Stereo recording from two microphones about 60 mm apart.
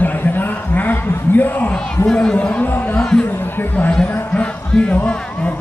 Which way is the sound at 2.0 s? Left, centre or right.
Centre.